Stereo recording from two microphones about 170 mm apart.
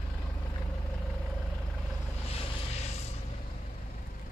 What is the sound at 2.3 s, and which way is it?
Vehicle, 40° left (ahead or behind).